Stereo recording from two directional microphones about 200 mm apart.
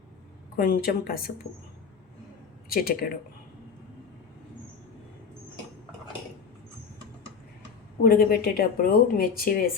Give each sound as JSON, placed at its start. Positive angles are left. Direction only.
{"t": 0.5, "sound": "speech", "side_deg": 45}
{"t": 2.6, "sound": "speech", "side_deg": 50}
{"t": 8.0, "sound": "speech", "side_deg": 50}